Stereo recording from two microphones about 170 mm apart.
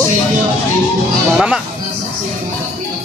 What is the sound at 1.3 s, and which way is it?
Speech, 5° right (ahead or behind).